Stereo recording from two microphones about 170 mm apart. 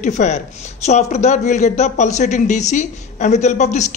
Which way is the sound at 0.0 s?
45° left (ahead or behind).